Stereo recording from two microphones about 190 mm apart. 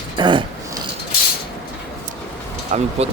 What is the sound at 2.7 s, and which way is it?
Speech, 40° right (ahead or behind).